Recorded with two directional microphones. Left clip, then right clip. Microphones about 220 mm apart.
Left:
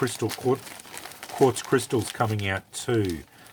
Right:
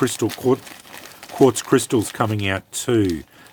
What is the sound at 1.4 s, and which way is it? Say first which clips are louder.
Speech: right 6 dB; 45° right (ahead or behind).